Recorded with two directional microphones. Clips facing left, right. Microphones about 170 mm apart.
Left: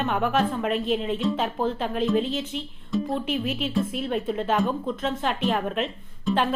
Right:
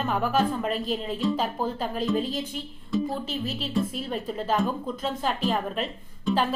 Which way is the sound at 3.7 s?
Centre (ahead or behind).